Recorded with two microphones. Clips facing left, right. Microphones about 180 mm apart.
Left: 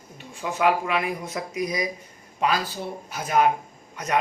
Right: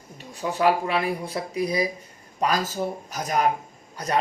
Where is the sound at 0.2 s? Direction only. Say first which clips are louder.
Right 1 dB; 35° right (ahead or behind).